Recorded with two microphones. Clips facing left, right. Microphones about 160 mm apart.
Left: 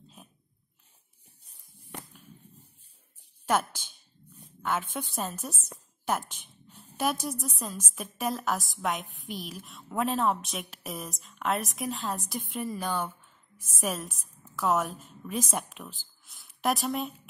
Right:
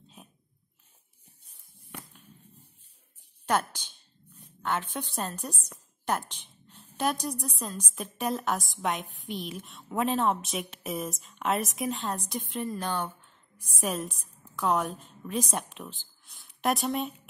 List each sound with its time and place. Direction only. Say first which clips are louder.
1.5 s a sound: left 2 dB; 30° left (ahead or behind)
3.4 s speech: even; 5° left (ahead or behind)
4.9 s a woman's voice: even; 5° left (ahead or behind)